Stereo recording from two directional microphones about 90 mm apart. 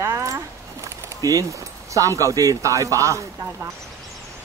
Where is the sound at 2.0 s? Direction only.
35° right (ahead or behind).